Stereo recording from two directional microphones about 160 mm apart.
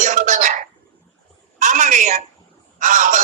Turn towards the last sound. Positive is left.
turn(degrees=-55)  # may be behind; listen again after turning